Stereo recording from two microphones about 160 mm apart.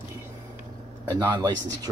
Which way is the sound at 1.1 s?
20° right (ahead or behind).